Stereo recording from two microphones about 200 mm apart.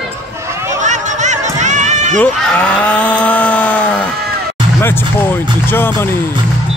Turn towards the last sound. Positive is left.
turn(degrees=10)  # may be behind; listen again after turning